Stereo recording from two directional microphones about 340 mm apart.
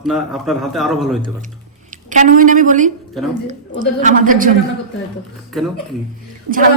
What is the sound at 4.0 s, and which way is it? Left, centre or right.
Speech, right.